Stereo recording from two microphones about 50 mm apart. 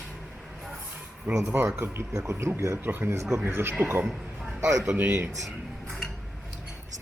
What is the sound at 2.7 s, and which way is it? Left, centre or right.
Speech, right.